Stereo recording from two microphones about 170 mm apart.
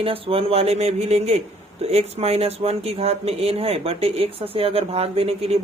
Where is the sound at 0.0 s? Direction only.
35° right (ahead or behind).